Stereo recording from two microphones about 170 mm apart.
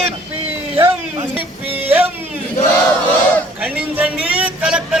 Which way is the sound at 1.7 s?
10° right (ahead or behind).